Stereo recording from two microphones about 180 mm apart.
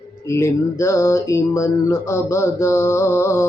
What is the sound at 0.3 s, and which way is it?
Music, 15° left (ahead or behind).